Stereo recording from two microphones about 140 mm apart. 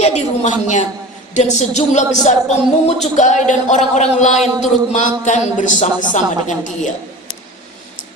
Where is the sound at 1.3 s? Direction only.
55° left (ahead or behind).